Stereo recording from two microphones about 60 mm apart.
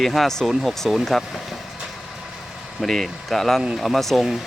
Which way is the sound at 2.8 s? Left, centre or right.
Centre.